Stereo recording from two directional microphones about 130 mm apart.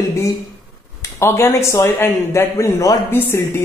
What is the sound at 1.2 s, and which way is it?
Speech, 20° left (ahead or behind).